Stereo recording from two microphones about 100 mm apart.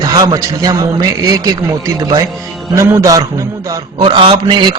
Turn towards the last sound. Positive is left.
turn(degrees=-50)  # may be behind; listen again after turning